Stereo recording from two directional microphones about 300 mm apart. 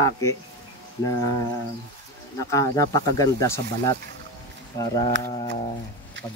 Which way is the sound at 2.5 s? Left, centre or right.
Centre.